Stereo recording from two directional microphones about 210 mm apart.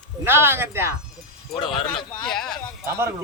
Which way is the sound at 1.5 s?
20° left (ahead or behind).